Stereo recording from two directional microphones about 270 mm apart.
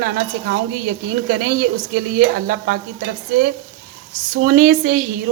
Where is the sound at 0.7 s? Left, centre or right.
Right.